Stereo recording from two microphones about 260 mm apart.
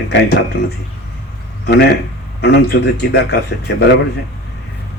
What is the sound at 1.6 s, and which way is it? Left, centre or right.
A man's voice, left.